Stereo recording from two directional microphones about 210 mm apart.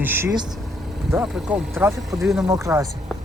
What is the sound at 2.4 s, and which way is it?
Speech, 15° right (ahead or behind).